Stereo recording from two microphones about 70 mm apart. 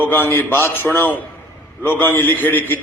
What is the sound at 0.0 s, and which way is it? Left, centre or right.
A man's voice, left.